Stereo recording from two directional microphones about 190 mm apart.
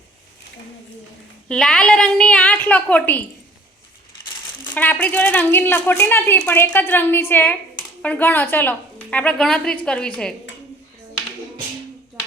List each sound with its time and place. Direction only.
1.5 s a woman's voice: 5° left (ahead or behind)
4.6 s a woman's voice: 10° left (ahead or behind)